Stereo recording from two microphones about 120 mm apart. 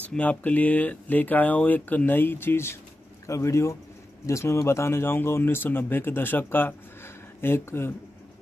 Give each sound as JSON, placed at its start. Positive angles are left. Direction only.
{"t": 0.0, "sound": "speech", "side_deg": 10}